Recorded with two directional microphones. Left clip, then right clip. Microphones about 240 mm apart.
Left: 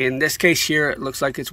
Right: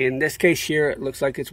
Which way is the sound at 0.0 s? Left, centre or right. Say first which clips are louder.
Left 2 dB; centre.